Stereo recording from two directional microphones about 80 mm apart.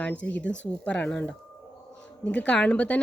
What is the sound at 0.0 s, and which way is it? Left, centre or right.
A woman's voice, centre.